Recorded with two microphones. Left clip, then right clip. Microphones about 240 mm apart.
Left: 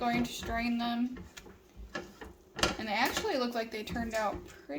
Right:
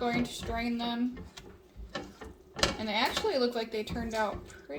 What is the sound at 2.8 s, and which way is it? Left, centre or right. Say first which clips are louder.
Speech: right 1 dB; left.